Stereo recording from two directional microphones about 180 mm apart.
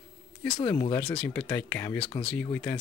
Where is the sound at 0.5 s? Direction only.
20° left (ahead or behind).